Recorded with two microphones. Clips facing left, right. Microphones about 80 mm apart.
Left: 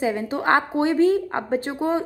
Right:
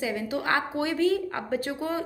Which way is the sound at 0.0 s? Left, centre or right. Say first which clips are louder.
Left 6 dB; left.